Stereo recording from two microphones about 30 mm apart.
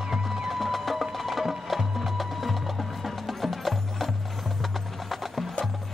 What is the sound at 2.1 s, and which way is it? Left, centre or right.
Music, centre.